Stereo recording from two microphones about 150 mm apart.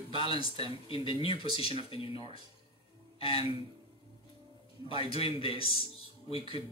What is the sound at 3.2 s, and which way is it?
Speech, 35° left (ahead or behind).